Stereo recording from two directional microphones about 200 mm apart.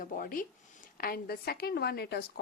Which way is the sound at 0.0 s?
45° left (ahead or behind).